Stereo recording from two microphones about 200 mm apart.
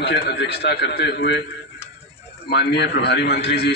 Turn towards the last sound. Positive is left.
turn(degrees=55)  # may be behind; listen again after turning